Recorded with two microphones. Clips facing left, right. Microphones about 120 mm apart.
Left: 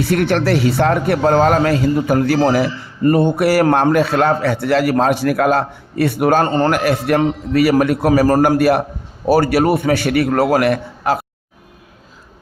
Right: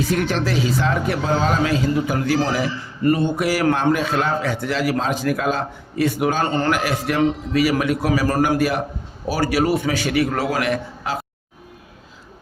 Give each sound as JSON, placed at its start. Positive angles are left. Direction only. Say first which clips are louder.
{"t": 0.0, "sound": "a man's voice", "louder": "left 5 dB", "side_deg": 65}